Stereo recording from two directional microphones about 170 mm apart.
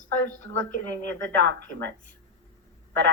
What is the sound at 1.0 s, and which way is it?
Speech, 90° right.